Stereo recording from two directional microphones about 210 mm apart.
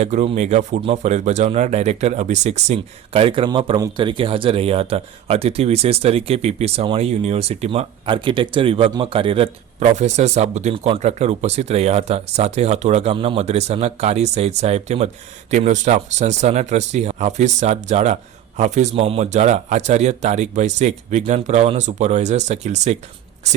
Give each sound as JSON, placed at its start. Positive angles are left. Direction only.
{"t": 0.0, "sound": "speech", "side_deg": -30}